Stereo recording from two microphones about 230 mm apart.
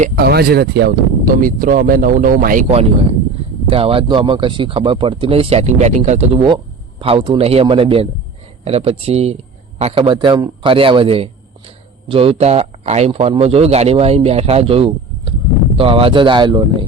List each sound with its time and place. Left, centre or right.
0.0 s a man's voice: right